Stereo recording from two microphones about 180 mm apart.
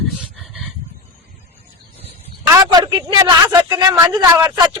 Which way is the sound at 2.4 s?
20° right (ahead or behind).